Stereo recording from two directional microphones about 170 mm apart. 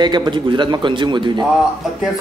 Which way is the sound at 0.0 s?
25° right (ahead or behind).